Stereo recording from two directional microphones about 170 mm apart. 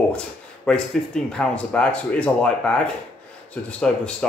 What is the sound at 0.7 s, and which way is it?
Speech, 5° left (ahead or behind).